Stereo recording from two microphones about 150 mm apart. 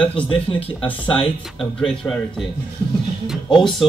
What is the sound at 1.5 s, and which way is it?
Speech, 5° left (ahead or behind).